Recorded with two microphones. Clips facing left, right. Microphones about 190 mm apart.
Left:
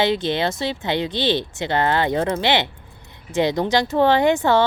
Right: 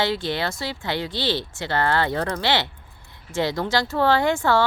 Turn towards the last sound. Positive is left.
turn(degrees=20)  # may be behind; listen again after turning